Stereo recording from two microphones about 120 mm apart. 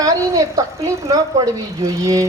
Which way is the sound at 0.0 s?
30° right (ahead or behind).